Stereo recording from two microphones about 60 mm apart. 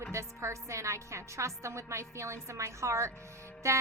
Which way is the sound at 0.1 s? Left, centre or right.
Right.